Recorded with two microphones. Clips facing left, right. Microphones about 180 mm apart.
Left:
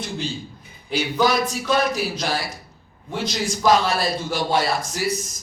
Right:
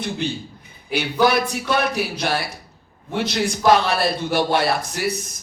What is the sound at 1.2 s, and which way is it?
Speech, 60° right (ahead or behind).